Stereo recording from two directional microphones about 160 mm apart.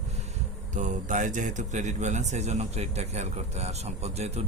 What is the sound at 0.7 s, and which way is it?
A man's voice, 50° right (ahead or behind).